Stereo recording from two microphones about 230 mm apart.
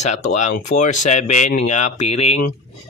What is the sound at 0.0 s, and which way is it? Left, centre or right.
Speech, left.